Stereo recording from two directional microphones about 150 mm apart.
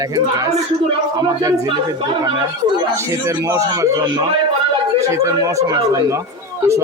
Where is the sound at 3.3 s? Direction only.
20° right (ahead or behind).